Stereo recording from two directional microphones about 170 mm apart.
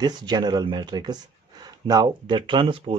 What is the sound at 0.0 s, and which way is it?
Speech, 25° right (ahead or behind).